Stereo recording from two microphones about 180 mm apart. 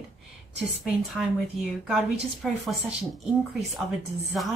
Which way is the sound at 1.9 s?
Centre (ahead or behind).